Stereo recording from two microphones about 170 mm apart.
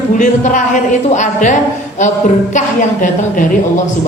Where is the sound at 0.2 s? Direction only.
50° left (ahead or behind).